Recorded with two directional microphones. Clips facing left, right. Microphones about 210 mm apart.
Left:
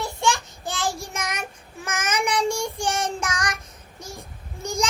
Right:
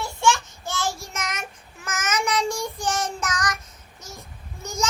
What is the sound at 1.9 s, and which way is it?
Child singing, 30° left (ahead or behind).